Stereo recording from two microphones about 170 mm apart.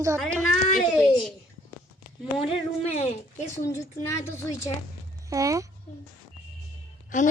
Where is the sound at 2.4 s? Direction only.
40° left (ahead or behind).